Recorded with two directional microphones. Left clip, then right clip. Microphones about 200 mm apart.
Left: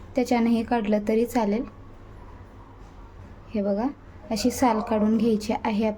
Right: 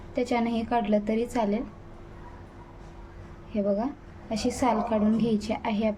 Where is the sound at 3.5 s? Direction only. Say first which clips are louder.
Left 1 dB; 20° left (ahead or behind).